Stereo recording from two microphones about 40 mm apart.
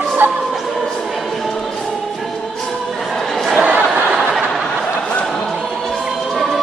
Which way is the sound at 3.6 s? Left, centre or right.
Right.